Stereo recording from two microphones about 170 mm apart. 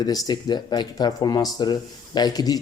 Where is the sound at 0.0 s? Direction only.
20° left (ahead or behind).